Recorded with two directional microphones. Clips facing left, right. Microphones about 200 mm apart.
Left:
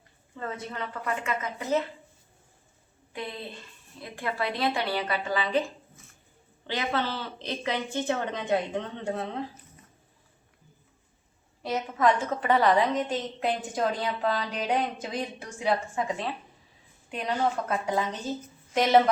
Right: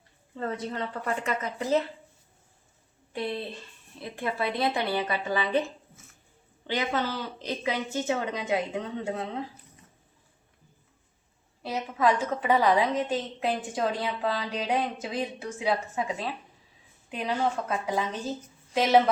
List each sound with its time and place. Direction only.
0.3 s a woman's voice: 35° right (ahead or behind)
4.1 s speech: 20° right (ahead or behind)
6.7 s a woman's voice: 15° right (ahead or behind)
11.6 s a woman's voice: 5° right (ahead or behind)